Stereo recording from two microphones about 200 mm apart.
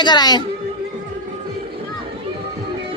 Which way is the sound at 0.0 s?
20° left (ahead or behind).